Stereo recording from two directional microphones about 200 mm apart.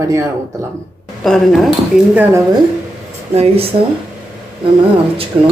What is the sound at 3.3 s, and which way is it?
Speech, 30° right (ahead or behind).